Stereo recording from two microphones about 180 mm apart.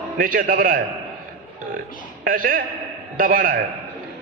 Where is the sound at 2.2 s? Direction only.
50° right (ahead or behind).